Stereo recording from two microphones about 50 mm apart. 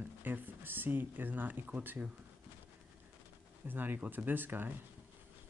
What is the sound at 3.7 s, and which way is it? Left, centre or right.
Speech, right.